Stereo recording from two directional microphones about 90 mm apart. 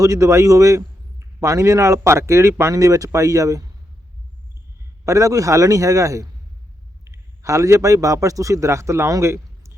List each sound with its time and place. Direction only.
0.0 s speech: 35° right (ahead or behind)
5.0 s a man's voice: 40° right (ahead or behind)